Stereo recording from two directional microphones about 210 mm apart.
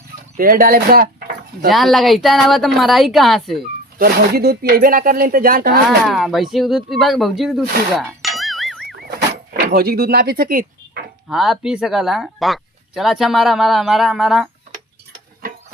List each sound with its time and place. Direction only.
0.3 s speech: 40° right (ahead or behind)
1.7 s speech: centre (ahead or behind)
3.9 s speech: 45° right (ahead or behind)
6.1 s speech: centre (ahead or behind)
8.9 s vehicle: 50° right (ahead or behind)
11.3 s speech: centre (ahead or behind)